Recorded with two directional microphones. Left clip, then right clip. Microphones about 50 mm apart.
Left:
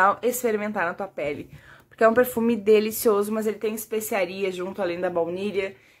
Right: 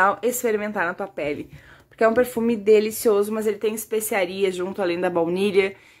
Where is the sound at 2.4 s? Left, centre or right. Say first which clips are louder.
Right 2 dB; centre.